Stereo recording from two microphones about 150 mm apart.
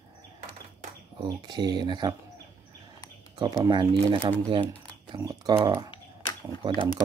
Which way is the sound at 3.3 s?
30° right (ahead or behind).